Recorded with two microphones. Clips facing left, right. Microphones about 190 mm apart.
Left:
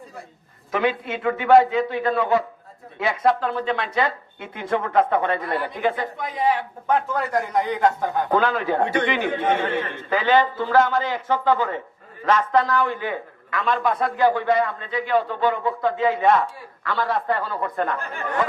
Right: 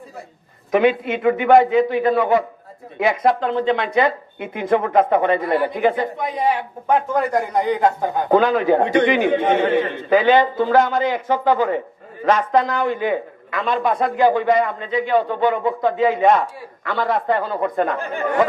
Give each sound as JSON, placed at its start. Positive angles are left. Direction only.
{"t": 0.7, "sound": "a man's voice", "side_deg": -15}